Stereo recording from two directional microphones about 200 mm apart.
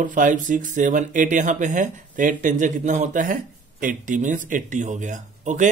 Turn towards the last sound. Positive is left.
turn(degrees=-40)  # may be behind; listen again after turning